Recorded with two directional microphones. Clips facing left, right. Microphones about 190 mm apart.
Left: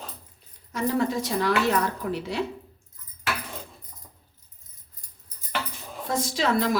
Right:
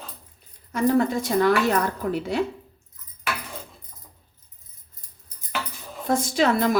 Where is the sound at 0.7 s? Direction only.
50° right (ahead or behind).